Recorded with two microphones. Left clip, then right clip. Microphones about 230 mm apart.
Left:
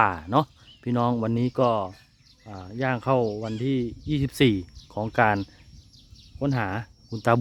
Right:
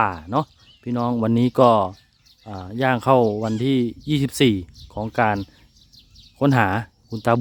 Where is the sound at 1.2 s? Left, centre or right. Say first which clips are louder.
Right 7 dB; centre.